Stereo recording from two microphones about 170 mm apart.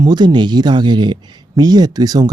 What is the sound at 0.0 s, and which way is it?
Speech, 25° right (ahead or behind).